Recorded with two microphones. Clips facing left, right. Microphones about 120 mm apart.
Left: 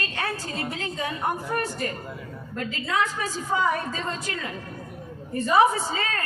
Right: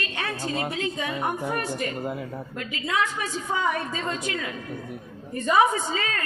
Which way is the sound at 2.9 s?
40° left (ahead or behind).